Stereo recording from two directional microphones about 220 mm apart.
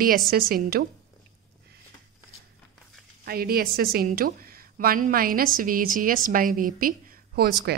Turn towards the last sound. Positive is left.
turn(degrees=-40)  # may be behind; listen again after turning